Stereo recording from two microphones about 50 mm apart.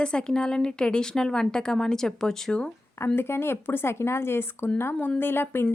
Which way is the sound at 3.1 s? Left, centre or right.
Left.